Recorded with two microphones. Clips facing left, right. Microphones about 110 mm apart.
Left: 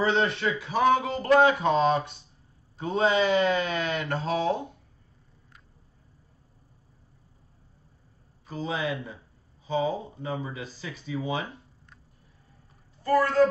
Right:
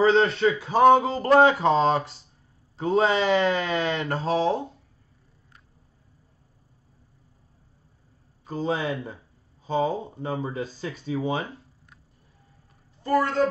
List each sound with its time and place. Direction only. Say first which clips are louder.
0.0 s speech: right 6 dB; 30° right (ahead or behind)
8.5 s speech: right 3 dB; 35° right (ahead or behind)
13.0 s speech: even; 20° right (ahead or behind)